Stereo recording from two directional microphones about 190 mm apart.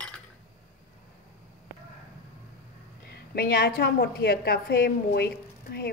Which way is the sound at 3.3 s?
55° left (ahead or behind).